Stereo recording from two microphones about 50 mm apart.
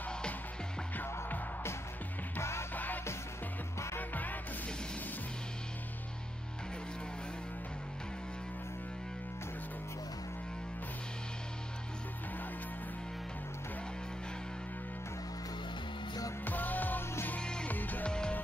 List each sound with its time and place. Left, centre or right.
0.9 s music: left
2.7 s music: left
4.1 s music: left
16.4 s music: left
17.4 s music: centre
17.6 s music: left
18.0 s music: centre